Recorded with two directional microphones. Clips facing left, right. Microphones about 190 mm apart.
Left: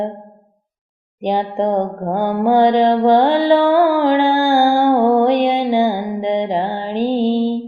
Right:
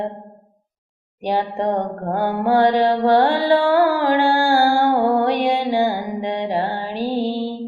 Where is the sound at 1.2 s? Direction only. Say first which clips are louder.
Left 3 dB; 20° left (ahead or behind).